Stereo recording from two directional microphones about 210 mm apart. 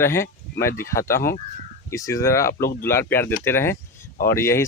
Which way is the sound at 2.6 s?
45° left (ahead or behind).